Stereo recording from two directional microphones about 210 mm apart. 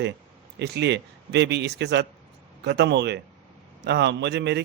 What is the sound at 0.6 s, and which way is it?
A man's voice, 55° right (ahead or behind).